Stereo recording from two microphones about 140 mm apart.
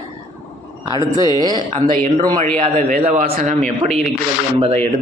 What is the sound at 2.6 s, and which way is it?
Speech, 60° right (ahead or behind).